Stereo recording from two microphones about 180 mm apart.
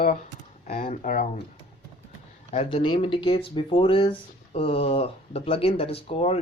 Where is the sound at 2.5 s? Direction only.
35° left (ahead or behind).